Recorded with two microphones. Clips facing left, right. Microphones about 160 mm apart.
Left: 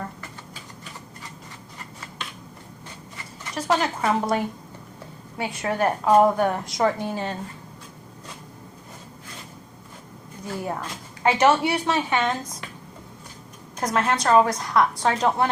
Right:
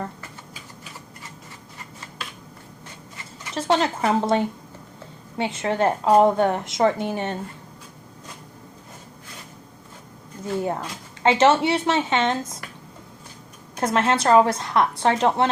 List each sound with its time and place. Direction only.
3.5 s a woman's voice: 25° right (ahead or behind)
10.6 s a woman's voice: 25° right (ahead or behind)
13.7 s a woman's voice: 25° right (ahead or behind)